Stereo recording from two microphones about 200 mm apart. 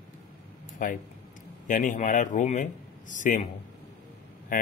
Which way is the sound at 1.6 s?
40° left (ahead or behind).